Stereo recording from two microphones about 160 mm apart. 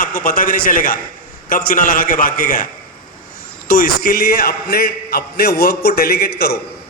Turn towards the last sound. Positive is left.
turn(degrees=80)